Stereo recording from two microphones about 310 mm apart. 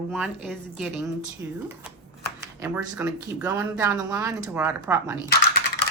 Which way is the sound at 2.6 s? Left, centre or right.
Centre.